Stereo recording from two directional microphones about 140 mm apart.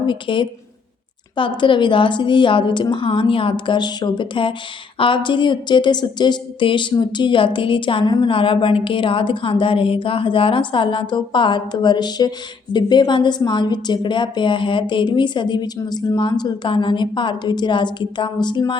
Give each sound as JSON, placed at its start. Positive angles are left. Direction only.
{"t": 0.0, "sound": "a woman's voice", "side_deg": 35}